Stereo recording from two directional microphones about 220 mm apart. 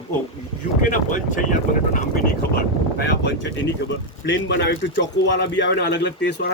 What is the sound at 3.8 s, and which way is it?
Speech, 55° left (ahead or behind).